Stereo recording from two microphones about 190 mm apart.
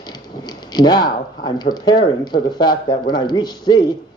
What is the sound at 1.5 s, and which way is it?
Speech, 20° left (ahead or behind).